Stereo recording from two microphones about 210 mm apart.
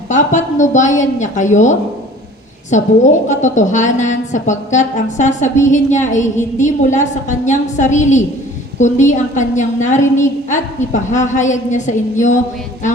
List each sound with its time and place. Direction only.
0.1 s a woman's voice: 35° left (ahead or behind)